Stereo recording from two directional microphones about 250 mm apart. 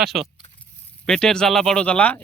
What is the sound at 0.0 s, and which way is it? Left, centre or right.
Speech, centre.